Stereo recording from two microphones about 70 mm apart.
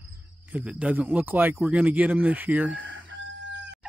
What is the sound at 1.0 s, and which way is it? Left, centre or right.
Speech, right.